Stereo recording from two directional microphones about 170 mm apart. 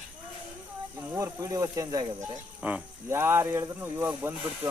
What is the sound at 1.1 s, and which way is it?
Speech, 20° right (ahead or behind).